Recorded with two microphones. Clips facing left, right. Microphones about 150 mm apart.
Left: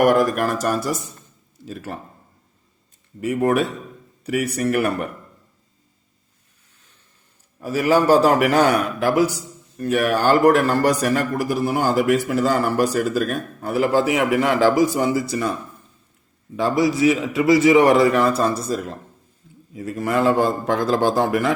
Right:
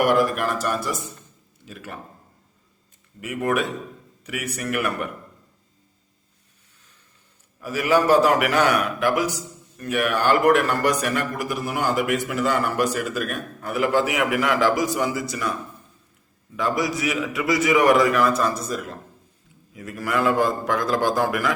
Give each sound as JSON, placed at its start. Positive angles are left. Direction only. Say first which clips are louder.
{"t": 0.0, "sound": "a man's voice", "louder": "left 3 dB", "side_deg": 45}
{"t": 3.2, "sound": "a man's voice", "louder": "left 5 dB", "side_deg": 35}
{"t": 7.6, "sound": "a man's voice", "louder": "left 3 dB", "side_deg": 30}
{"t": 16.6, "sound": "a man's voice", "louder": "left 6 dB", "side_deg": 30}